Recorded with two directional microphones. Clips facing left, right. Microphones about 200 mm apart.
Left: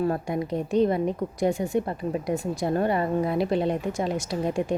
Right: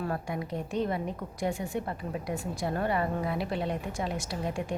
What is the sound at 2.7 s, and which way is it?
Speech, 30° left (ahead or behind).